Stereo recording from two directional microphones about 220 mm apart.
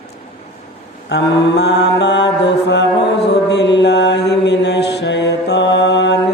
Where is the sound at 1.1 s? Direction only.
50° left (ahead or behind).